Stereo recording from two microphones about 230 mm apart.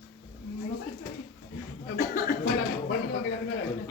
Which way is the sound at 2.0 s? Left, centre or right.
Left.